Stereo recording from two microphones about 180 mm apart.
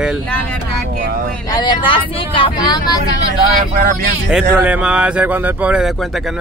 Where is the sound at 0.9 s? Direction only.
55° right (ahead or behind).